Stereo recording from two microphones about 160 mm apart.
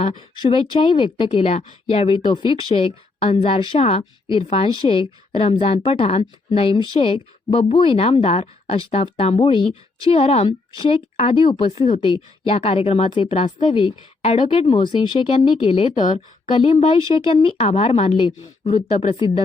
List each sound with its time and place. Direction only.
0.0 s speech: 30° left (ahead or behind)